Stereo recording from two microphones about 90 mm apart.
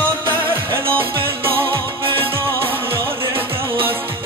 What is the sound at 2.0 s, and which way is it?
Music, 80° right.